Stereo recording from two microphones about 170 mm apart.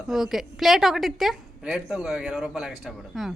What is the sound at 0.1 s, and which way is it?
A woman's voice, centre (ahead or behind).